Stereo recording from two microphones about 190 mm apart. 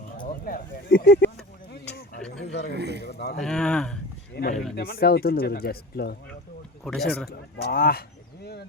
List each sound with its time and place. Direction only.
0.4 s speech: 50° left (ahead or behind)
2.4 s a sound: 65° left (ahead or behind)
2.7 s speech: 60° right (ahead or behind)
3.1 s speech: 60° left (ahead or behind)
3.4 s speech: 5° left (ahead or behind)
4.4 s speech: 55° left (ahead or behind)
6.8 s speech: centre (ahead or behind)
7.3 s speech: 55° left (ahead or behind)